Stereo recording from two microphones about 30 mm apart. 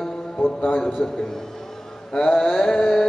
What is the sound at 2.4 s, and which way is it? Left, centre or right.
Speech, centre.